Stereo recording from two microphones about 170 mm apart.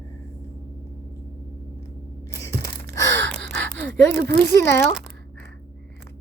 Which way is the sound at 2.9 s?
15° left (ahead or behind).